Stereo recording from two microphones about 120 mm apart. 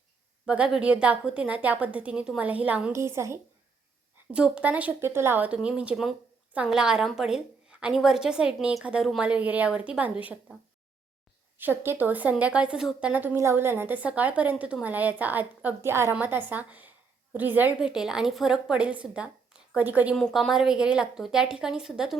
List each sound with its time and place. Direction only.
0.4 s speech: 10° right (ahead or behind)
2.9 s a woman's voice: 25° right (ahead or behind)
4.3 s speech: 10° right (ahead or behind)
11.5 s speech: 15° right (ahead or behind)
20.1 s speech: 5° left (ahead or behind)